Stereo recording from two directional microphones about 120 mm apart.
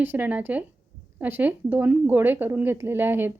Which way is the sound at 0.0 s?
15° right (ahead or behind).